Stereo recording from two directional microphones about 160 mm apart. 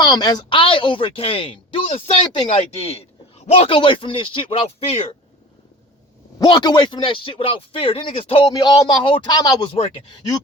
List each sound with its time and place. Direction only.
0.0 s a man's voice: 25° left (ahead or behind)
6.4 s a man's voice: 25° left (ahead or behind)
9.7 s a man's voice: 35° left (ahead or behind)